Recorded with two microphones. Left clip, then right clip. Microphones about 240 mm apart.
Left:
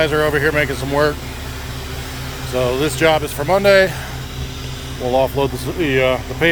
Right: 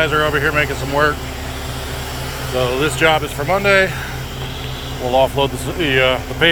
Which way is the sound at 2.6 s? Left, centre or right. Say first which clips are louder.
Even; left.